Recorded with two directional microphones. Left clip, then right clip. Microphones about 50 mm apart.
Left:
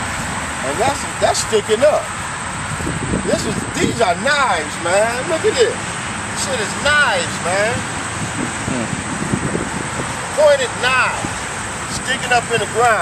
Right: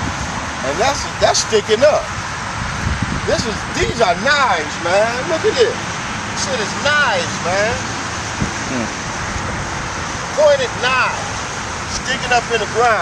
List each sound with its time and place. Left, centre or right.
0.7 s speech: right
4.0 s speech: right; by 7.7 s centre
10.4 s speech: centre